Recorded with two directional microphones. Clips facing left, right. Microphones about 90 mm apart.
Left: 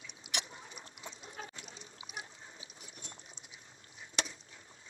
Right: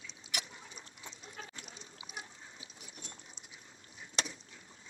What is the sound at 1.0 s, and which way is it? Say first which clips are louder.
Liquid: left 3 dB; 30° left (ahead or behind).